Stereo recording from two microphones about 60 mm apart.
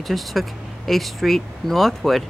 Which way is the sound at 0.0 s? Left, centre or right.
Centre.